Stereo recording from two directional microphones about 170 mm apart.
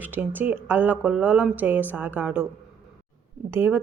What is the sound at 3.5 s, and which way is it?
Speech, 15° right (ahead or behind).